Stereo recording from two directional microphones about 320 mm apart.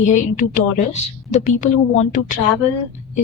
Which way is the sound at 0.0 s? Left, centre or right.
Left.